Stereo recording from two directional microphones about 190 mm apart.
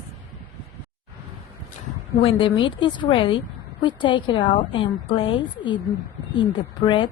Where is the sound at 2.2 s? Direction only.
30° left (ahead or behind).